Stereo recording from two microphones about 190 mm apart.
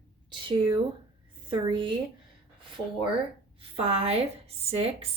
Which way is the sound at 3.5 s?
30° right (ahead or behind).